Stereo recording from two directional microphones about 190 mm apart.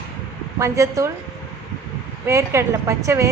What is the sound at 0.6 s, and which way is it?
Speech, 15° right (ahead or behind).